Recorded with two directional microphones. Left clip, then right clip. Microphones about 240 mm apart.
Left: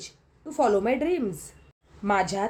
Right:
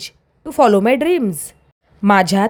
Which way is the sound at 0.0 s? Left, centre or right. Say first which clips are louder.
Right 11 dB; right.